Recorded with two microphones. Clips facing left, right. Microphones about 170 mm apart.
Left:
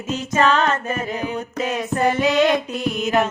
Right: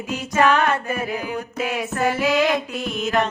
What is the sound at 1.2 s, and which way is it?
Music, 25° left (ahead or behind).